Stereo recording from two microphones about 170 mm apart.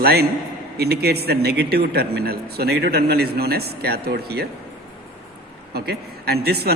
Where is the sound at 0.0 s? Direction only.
70° right (ahead or behind).